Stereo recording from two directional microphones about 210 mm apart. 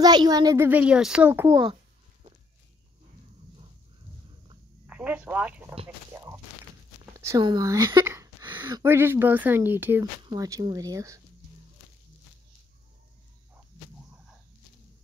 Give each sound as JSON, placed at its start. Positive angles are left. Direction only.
{"t": 0.0, "sound": "a child's voice", "side_deg": -20}
{"t": 4.8, "sound": "speech", "side_deg": -5}
{"t": 6.1, "sound": "a sound", "side_deg": -15}
{"t": 8.6, "sound": "a child's voice", "side_deg": -15}